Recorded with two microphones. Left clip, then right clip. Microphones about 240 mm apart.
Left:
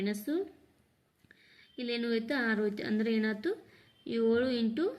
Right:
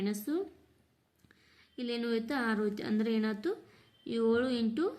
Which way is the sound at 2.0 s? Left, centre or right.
Centre.